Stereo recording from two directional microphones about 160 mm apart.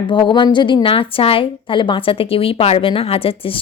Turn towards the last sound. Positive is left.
turn(degrees=35)  # may be behind; listen again after turning